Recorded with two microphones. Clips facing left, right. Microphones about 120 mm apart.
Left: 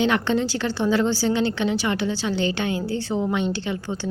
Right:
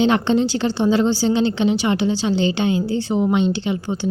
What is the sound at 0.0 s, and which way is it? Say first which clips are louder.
A woman's voice: right 4 dB; 25° right (ahead or behind).